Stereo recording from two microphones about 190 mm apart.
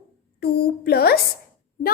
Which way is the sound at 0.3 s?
55° left (ahead or behind).